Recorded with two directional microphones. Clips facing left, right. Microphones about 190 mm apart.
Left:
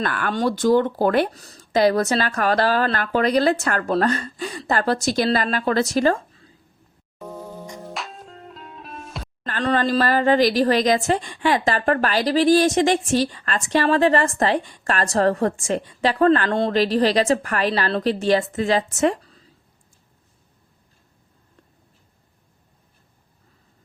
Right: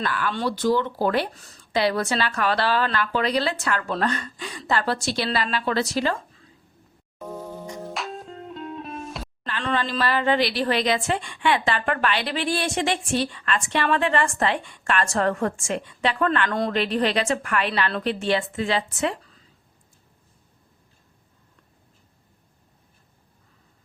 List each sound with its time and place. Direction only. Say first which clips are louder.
0.0 s speech: left 3 dB; 50° left (ahead or behind)
1.4 s speech: left 5 dB; 40° left (ahead or behind)
7.9 s music: right 2 dB; centre (ahead or behind)
9.4 s a woman's voice: left 5 dB; 40° left (ahead or behind)